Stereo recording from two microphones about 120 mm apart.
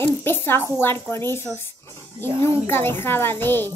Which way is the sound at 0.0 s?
20° left (ahead or behind).